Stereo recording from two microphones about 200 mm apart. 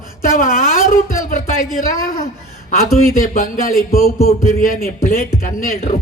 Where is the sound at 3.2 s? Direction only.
45° left (ahead or behind).